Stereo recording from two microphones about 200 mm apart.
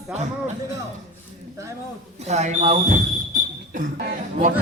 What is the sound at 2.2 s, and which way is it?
Speech, 35° right (ahead or behind).